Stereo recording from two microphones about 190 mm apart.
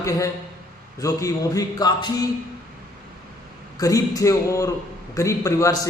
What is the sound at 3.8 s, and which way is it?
A man's voice, 20° left (ahead or behind).